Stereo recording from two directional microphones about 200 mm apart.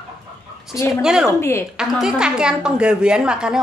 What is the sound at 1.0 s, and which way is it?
Speech, 5° right (ahead or behind).